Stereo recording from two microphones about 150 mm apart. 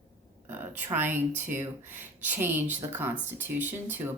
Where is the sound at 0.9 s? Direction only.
15° right (ahead or behind).